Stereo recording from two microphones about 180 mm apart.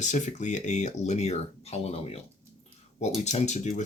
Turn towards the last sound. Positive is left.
turn(degrees=40)  # may be behind; listen again after turning